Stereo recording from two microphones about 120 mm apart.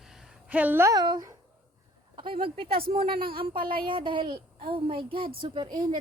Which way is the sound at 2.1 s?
45° right (ahead or behind).